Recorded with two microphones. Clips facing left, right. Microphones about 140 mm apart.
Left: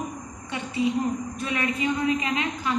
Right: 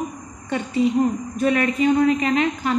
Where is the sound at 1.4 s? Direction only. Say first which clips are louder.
Right 10 dB; 50° right (ahead or behind).